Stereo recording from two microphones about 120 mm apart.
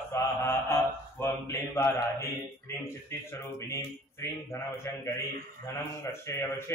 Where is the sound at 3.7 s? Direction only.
20° left (ahead or behind).